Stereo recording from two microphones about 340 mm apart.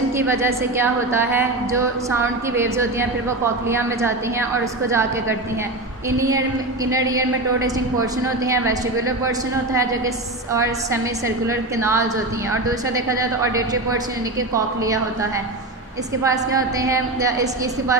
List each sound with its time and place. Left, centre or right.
0.3 s a woman's voice: centre
6.0 s a woman's voice: centre
10.5 s a woman's voice: centre
16.2 s a woman's voice: centre